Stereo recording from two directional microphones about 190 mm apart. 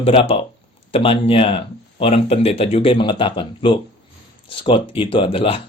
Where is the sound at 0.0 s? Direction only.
30° left (ahead or behind).